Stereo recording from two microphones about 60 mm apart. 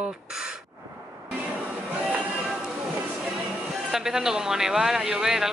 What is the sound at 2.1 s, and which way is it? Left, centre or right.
Music, centre.